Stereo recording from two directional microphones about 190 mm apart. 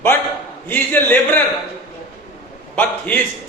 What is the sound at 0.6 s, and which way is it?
Speech, 10° left (ahead or behind).